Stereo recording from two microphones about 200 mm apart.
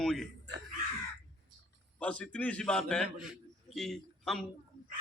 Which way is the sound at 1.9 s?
5° left (ahead or behind).